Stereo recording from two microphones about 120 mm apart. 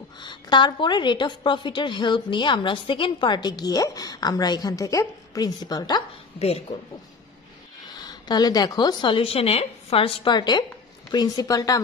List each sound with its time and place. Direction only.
0.2 s a woman's voice: 40° left (ahead or behind)
7.9 s a woman's voice: 35° left (ahead or behind)